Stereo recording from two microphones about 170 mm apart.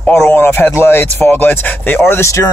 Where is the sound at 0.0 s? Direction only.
10° left (ahead or behind).